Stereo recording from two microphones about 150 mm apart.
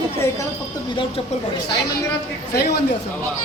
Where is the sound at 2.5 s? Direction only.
90° left.